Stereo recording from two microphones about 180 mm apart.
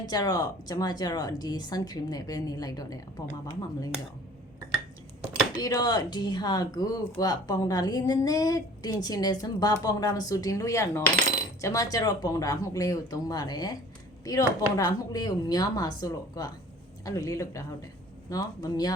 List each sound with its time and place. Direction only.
0.1 s a woman's voice: 20° left (ahead or behind)
5.5 s a woman's voice: 20° left (ahead or behind)